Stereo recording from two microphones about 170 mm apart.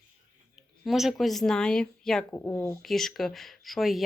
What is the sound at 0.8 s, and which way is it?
Speech, centre (ahead or behind).